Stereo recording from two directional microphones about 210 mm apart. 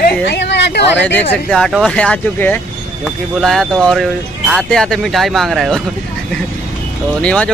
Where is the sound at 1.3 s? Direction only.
5° left (ahead or behind).